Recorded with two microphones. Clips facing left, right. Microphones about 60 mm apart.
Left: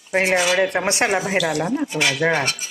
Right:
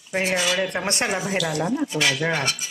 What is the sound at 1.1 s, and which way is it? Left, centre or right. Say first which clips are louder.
Speech: left 4 dB; left.